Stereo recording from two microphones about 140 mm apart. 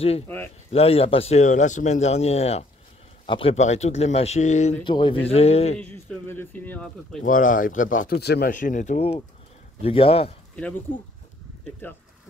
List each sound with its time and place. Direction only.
0.7 s speech: 45° left (ahead or behind)
3.3 s a man's voice: 40° left (ahead or behind)
3.5 s speech: 55° left (ahead or behind)
4.8 s speech: 35° left (ahead or behind)
5.9 s speech: 15° left (ahead or behind)
7.2 s speech: 70° left (ahead or behind); by 10.3 s 45° left (ahead or behind)